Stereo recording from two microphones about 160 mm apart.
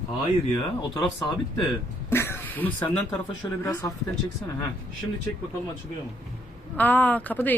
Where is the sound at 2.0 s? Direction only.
15° left (ahead or behind).